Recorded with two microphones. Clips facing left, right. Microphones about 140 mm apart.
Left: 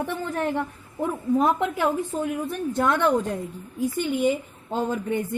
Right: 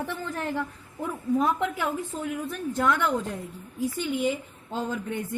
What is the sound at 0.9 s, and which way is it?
Speech, 35° left (ahead or behind).